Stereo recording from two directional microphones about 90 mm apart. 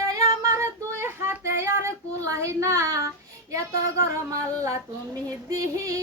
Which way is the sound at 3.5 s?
35° right (ahead or behind).